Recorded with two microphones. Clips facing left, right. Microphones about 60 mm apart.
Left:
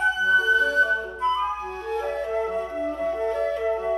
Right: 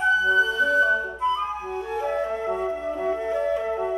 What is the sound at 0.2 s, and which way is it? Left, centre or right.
Flute, centre.